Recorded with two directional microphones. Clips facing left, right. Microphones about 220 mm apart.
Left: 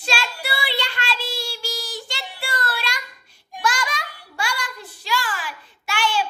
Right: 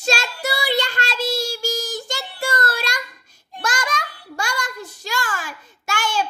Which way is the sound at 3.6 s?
45° right (ahead or behind).